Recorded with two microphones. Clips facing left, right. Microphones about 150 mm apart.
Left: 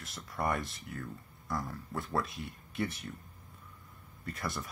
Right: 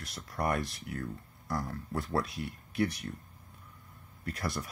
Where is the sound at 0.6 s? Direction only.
75° right (ahead or behind).